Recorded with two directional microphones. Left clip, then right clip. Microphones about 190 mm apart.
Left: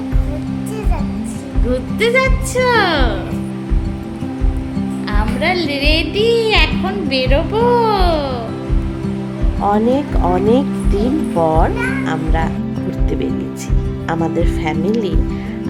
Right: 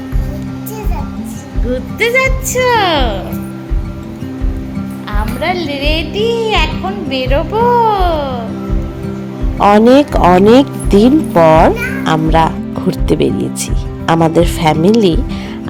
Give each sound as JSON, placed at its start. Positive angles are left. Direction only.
{"t": 1.7, "sound": "speech", "side_deg": -5}
{"t": 5.4, "sound": "a woman's voice", "side_deg": 0}
{"t": 9.6, "sound": "speech", "side_deg": -35}